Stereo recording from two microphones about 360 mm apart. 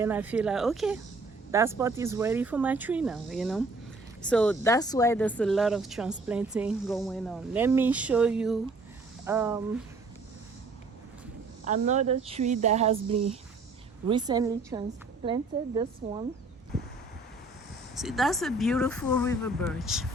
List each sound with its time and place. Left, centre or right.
0.0 s speech: centre
11.6 s a woman's voice: centre
18.0 s speech: centre